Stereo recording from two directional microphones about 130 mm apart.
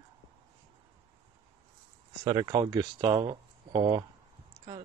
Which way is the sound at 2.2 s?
30° right (ahead or behind).